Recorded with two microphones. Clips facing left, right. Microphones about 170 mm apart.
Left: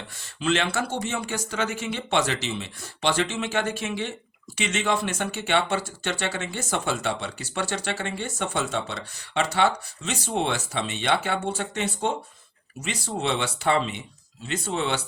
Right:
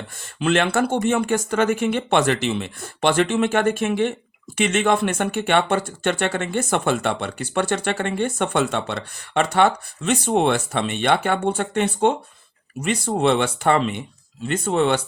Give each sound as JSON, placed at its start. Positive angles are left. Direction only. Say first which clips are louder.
{"t": 0.3, "sound": "speech", "louder": "right 6 dB", "side_deg": -55}